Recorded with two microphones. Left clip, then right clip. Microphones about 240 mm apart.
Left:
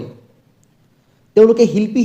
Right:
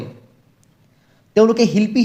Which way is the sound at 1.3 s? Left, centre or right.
Right.